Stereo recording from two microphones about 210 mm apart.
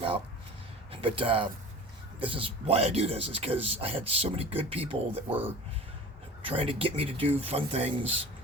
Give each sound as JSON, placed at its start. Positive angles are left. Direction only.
{"t": 0.9, "sound": "speech", "side_deg": -25}
{"t": 6.4, "sound": "speech", "side_deg": -25}